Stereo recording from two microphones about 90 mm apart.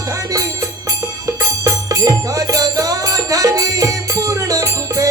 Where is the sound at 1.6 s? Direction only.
40° right (ahead or behind).